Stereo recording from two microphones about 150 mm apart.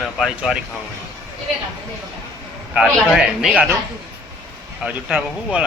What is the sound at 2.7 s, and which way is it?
Speech, 5° right (ahead or behind).